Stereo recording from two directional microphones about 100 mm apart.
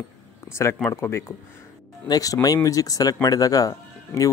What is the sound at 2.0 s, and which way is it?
Speech, 40° left (ahead or behind).